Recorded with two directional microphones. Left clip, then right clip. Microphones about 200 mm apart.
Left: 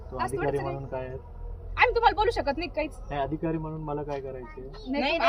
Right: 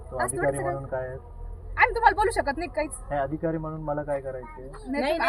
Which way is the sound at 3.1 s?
15° right (ahead or behind).